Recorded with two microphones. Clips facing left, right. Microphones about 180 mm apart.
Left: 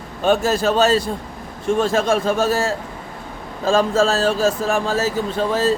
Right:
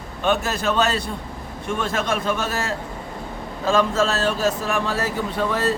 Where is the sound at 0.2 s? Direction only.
30° left (ahead or behind).